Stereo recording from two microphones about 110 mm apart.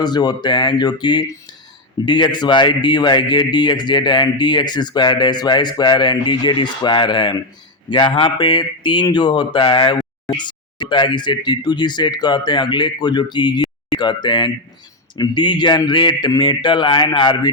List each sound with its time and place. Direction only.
0.0 s speech: 40° left (ahead or behind)